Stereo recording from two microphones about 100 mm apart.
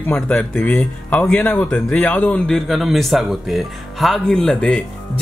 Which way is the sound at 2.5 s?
Centre (ahead or behind).